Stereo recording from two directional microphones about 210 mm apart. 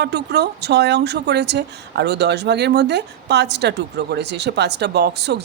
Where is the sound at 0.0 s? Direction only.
50° right (ahead or behind).